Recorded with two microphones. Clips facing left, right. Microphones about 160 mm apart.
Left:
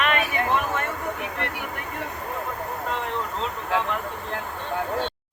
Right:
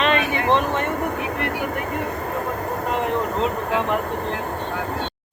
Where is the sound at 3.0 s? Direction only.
60° right (ahead or behind).